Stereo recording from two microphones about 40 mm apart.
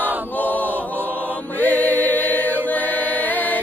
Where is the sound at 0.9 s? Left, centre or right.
Right.